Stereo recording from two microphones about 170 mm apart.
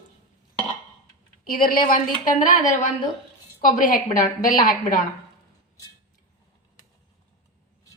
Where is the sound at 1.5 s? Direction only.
55° left (ahead or behind).